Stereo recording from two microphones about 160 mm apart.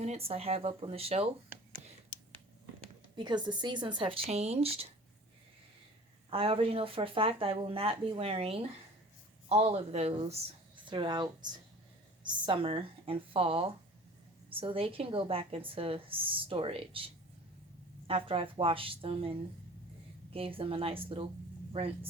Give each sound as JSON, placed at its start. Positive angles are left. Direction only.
{"t": 0.0, "sound": "speech", "side_deg": -40}
{"t": 3.2, "sound": "speech", "side_deg": -30}
{"t": 6.3, "sound": "speech", "side_deg": -35}
{"t": 18.1, "sound": "speech", "side_deg": -35}